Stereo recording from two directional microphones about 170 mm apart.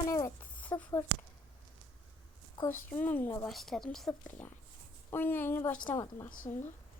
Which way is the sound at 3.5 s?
Centre (ahead or behind).